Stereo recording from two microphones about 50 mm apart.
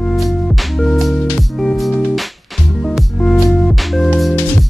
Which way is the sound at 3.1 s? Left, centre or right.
Centre.